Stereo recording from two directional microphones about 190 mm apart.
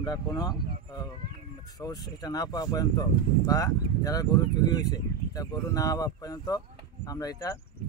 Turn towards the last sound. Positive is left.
turn(degrees=15)  # may be behind; listen again after turning